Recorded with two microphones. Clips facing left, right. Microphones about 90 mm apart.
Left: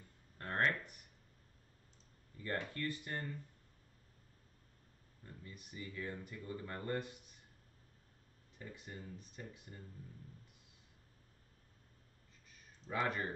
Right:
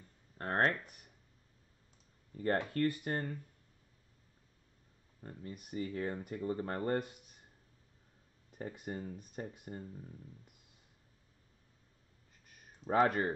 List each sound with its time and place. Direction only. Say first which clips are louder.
0.4 s speech: right 4 dB; 40° right (ahead or behind)
2.3 s speech: right 8 dB; 50° right (ahead or behind)
5.2 s speech: right 8 dB; 50° right (ahead or behind)
8.5 s speech: right 9 dB; 55° right (ahead or behind)
12.4 s a sound: right 10 dB; 60° right (ahead or behind)